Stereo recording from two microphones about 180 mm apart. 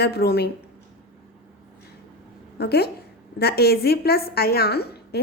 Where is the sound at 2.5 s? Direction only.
65° left (ahead or behind).